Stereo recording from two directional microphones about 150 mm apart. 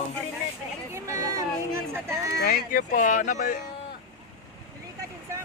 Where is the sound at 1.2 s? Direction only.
20° right (ahead or behind).